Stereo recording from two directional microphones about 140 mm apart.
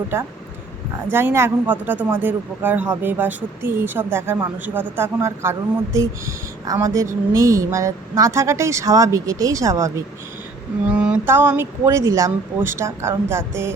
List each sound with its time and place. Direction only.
0.1 s speech: 15° right (ahead or behind)
10.8 s speech: 10° right (ahead or behind)